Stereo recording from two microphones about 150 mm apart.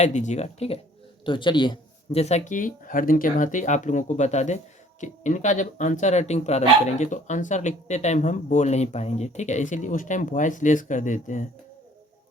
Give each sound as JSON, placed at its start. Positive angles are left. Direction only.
{"t": 0.0, "sound": "speech", "side_deg": 50}
{"t": 1.2, "sound": "a man's voice", "side_deg": 30}
{"t": 2.2, "sound": "speech", "side_deg": 50}